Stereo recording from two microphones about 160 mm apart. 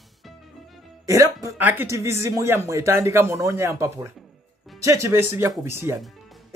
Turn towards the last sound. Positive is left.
turn(degrees=-15)  # may be behind; listen again after turning